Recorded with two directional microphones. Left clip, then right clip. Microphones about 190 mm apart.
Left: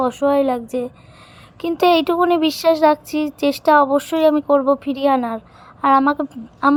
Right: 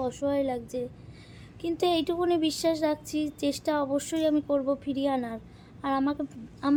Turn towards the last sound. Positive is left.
turn(degrees=30)  # may be behind; listen again after turning